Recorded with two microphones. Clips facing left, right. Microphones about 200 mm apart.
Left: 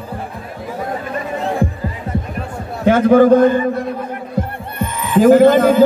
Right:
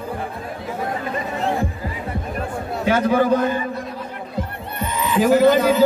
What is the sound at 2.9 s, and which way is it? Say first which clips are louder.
Speech: left 8 dB; 50° left (ahead or behind).